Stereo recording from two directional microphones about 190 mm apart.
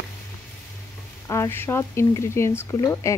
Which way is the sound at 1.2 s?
15° left (ahead or behind).